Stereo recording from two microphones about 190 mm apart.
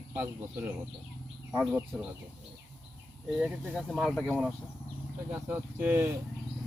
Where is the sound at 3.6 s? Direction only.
5° left (ahead or behind).